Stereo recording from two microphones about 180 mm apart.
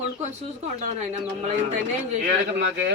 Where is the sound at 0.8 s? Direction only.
40° right (ahead or behind).